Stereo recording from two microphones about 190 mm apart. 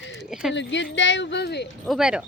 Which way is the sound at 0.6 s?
70° left (ahead or behind).